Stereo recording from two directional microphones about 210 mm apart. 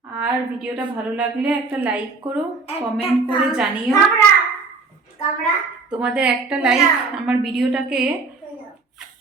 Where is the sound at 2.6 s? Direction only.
25° left (ahead or behind).